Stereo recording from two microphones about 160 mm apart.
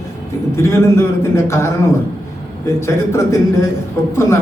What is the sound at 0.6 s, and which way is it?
A man's voice, 15° left (ahead or behind).